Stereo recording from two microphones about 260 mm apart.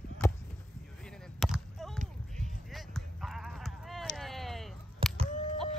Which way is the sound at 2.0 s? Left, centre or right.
Right.